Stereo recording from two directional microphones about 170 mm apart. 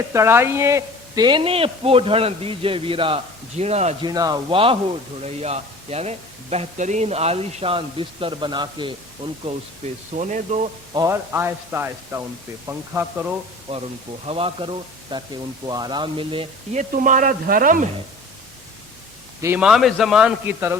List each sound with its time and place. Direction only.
0.1 s speech: 15° right (ahead or behind); by 3.9 s 40° right (ahead or behind)
4.0 s speech: 20° right (ahead or behind)
9.2 s speech: 40° right (ahead or behind)
10.9 s a man's voice: 15° right (ahead or behind)
14.3 s speech: 35° right (ahead or behind)
16.7 s speech: 50° right (ahead or behind)
19.4 s a man's voice: 15° right (ahead or behind)
19.6 s a man's voice: centre (ahead or behind)